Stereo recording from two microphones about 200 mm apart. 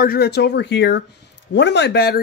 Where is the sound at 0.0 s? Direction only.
50° left (ahead or behind).